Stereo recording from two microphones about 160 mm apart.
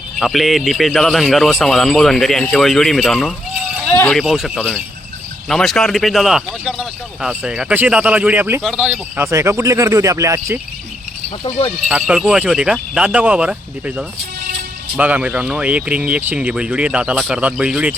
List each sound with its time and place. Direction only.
0.2 s speech: centre (ahead or behind); by 10.6 s 15° right (ahead or behind)
11.9 s speech: 5° right (ahead or behind)